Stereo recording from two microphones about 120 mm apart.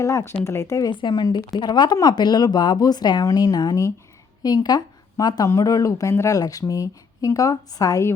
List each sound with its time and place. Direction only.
0.0 s speech: 25° left (ahead or behind)
0.9 s speech: 40° left (ahead or behind)